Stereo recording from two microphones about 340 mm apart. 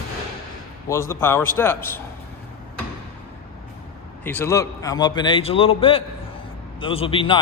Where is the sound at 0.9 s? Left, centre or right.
Centre.